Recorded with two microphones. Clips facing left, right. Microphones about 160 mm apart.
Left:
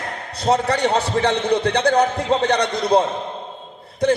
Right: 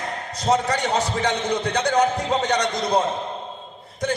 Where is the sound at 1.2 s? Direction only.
30° left (ahead or behind).